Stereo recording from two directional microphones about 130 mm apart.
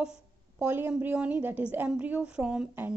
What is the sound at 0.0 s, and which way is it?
A woman's voice, 10° right (ahead or behind).